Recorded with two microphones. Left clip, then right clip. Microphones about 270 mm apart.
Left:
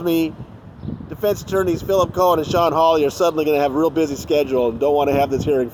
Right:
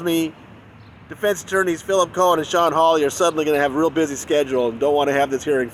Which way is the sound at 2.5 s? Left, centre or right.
Right.